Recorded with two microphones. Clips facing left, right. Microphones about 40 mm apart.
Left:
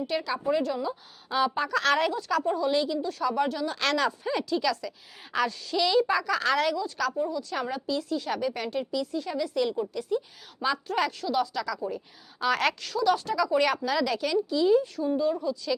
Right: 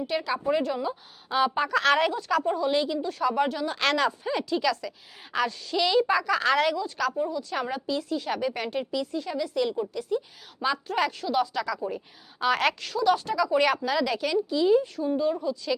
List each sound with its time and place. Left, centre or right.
0.1 s a woman's voice: centre
0.4 s a woman's voice: right
4.2 s a woman's voice: centre
9.2 s speech: centre
10.6 s a woman's voice: centre